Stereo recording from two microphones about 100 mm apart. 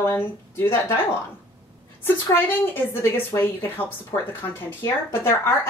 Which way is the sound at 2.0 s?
20° left (ahead or behind).